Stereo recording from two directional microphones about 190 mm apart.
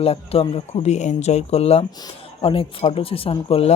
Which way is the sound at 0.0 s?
30° left (ahead or behind).